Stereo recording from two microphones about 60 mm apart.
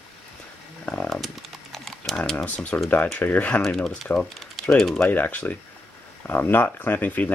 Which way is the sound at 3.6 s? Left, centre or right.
Centre.